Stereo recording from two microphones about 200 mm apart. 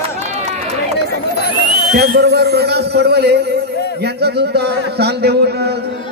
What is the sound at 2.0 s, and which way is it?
A man's voice, 55° right (ahead or behind).